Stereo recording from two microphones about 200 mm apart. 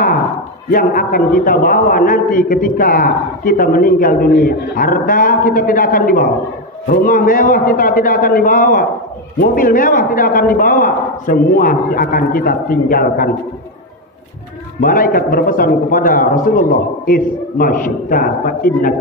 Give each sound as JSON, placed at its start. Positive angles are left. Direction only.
{"t": 0.7, "sound": "a man's voice", "side_deg": 45}
{"t": 14.8, "sound": "a man's voice", "side_deg": 45}